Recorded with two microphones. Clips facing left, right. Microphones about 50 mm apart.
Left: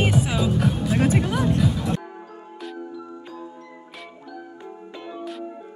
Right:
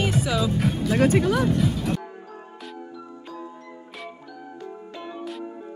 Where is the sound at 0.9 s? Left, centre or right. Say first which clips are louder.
Right 3 dB; right.